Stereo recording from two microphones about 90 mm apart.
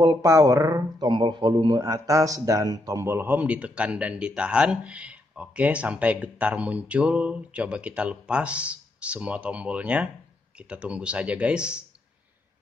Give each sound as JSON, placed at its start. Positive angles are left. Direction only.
{"t": 0.0, "sound": "speech", "side_deg": -40}
{"t": 3.0, "sound": "a man's voice", "side_deg": -25}